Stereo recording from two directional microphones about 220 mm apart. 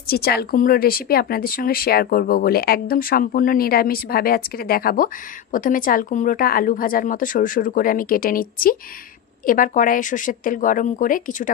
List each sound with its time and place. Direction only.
0.0 s speech: 45° left (ahead or behind)